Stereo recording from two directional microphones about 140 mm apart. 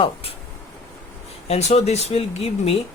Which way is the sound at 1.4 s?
45° left (ahead or behind).